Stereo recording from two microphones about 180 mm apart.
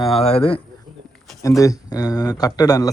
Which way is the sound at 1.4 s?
20° left (ahead or behind).